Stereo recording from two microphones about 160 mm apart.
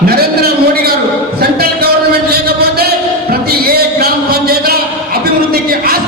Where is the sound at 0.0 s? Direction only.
75° right (ahead or behind).